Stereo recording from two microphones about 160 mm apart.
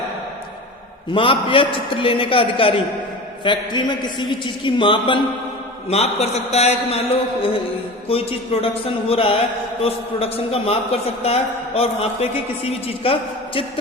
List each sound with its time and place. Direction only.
1.1 s a man's voice: 30° left (ahead or behind)
8.0 s a man's voice: 35° left (ahead or behind)